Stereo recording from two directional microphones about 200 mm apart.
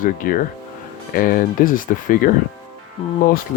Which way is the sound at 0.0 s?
45° left (ahead or behind).